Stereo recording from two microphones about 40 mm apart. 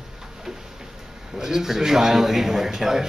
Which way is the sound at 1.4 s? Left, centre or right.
Centre.